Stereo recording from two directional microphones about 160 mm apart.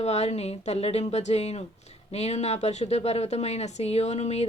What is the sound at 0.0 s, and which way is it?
Speech, 40° left (ahead or behind).